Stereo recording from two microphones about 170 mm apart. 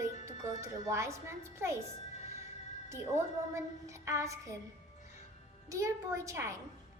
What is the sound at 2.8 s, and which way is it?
Speech, 15° right (ahead or behind).